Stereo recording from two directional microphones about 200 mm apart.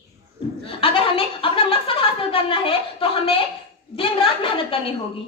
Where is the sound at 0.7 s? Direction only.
25° left (ahead or behind).